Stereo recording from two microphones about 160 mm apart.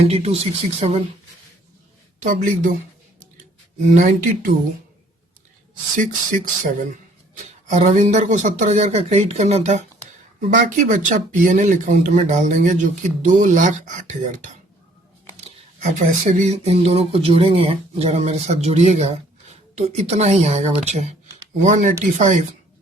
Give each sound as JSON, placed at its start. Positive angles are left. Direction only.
{"t": 0.0, "sound": "speech", "side_deg": -40}
{"t": 2.2, "sound": "speech", "side_deg": -55}
{"t": 6.0, "sound": "speech", "side_deg": -55}
{"t": 10.5, "sound": "speech", "side_deg": -55}